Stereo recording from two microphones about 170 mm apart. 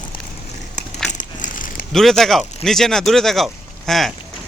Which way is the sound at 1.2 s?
50° left (ahead or behind).